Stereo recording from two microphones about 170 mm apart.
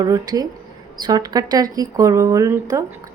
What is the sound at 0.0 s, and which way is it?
Speech, 25° right (ahead or behind).